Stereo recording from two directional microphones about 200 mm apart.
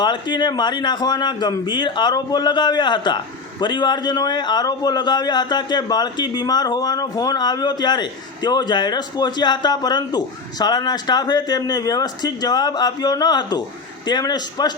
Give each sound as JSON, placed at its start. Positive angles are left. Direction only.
{"t": 0.0, "sound": "a man's voice", "side_deg": 20}